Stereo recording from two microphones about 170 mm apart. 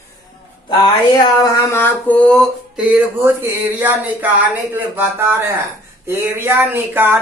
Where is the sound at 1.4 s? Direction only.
15° left (ahead or behind).